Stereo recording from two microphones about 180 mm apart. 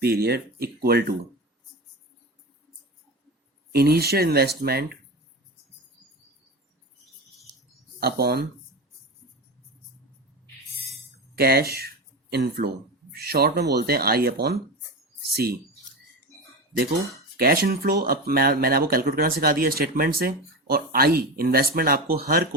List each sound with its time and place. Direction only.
0.0 s speech: 60° right (ahead or behind)
3.7 s speech: 60° right (ahead or behind)
7.9 s speech: 60° right (ahead or behind)
11.3 s speech: 60° right (ahead or behind)
17.3 s speech: 55° right (ahead or behind)